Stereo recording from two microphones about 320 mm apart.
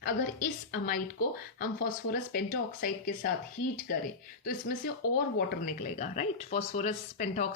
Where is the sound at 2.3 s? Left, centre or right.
Left.